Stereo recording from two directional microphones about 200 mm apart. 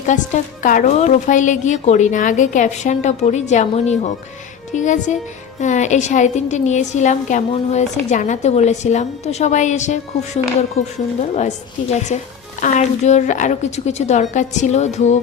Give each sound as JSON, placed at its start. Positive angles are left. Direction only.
{"t": 0.1, "sound": "a woman's voice", "side_deg": 35}